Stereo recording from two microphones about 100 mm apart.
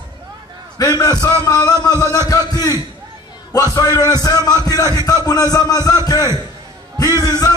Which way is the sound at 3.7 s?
40° left (ahead or behind).